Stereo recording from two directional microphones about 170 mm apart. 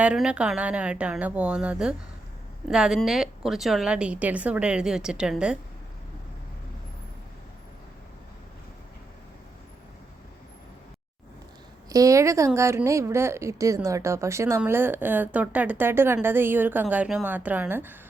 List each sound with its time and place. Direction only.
0.0 s a woman's voice: 5° right (ahead or behind)
11.9 s a woman's voice: 20° right (ahead or behind)